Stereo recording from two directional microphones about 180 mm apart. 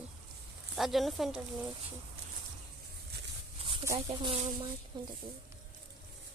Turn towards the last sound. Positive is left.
turn(degrees=-25)  # may be behind; listen again after turning